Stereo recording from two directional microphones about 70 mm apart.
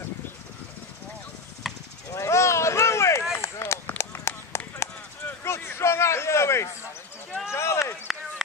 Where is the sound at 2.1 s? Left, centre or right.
Left.